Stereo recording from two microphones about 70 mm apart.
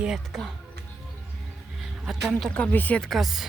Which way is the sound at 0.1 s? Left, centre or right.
Centre.